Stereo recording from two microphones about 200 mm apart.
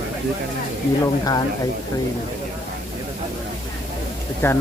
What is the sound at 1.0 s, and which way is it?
Speech, 20° left (ahead or behind).